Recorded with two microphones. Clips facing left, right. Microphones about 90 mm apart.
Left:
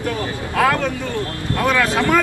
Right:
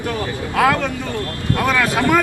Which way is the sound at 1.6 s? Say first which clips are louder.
Even; 15° right (ahead or behind).